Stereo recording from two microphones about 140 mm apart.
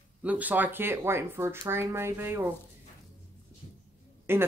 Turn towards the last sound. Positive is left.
turn(degrees=-15)  # may be behind; listen again after turning